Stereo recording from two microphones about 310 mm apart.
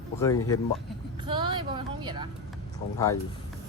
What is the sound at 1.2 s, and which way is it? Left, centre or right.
Vehicle, centre.